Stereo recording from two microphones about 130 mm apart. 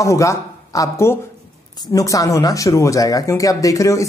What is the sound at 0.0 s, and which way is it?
Speech, 25° left (ahead or behind).